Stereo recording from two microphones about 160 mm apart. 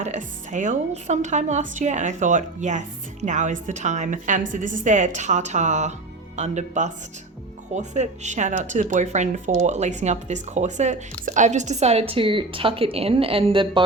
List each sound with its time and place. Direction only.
0.0 s a woman's voice: 50° right (ahead or behind); by 13.8 s 30° right (ahead or behind)